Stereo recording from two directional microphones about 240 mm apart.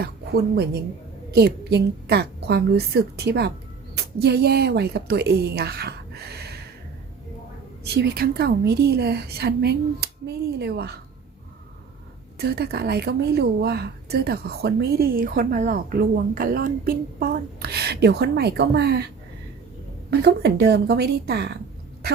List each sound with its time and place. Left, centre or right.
0.0 s a woman's voice: right
6.3 s a sound: right
7.9 s a woman's voice: right
12.4 s a woman's voice: right
20.1 s speech: right